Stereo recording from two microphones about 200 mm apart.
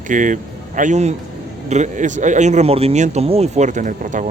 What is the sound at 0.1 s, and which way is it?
Speech, 40° right (ahead or behind).